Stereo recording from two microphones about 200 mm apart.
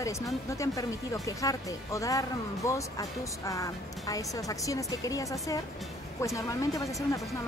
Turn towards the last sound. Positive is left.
turn(degrees=15)  # may be behind; listen again after turning